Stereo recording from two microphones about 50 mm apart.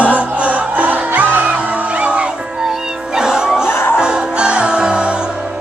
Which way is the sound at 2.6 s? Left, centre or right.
Centre.